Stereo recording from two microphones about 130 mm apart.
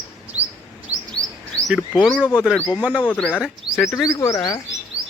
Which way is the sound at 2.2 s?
10° right (ahead or behind).